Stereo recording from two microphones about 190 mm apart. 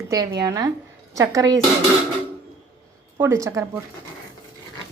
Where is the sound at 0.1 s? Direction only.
20° right (ahead or behind).